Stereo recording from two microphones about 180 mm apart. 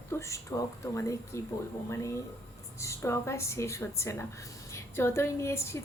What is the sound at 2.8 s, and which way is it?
Speech, 15° left (ahead or behind).